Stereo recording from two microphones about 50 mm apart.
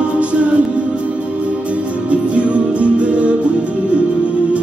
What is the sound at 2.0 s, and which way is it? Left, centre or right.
Music, right.